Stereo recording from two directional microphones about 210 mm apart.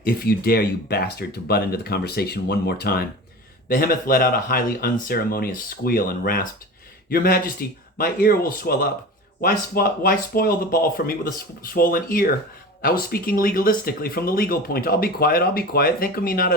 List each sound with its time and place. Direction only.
0.0 s speech: 45° left (ahead or behind)